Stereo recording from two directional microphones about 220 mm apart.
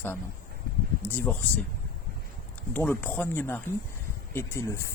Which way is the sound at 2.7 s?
10° left (ahead or behind).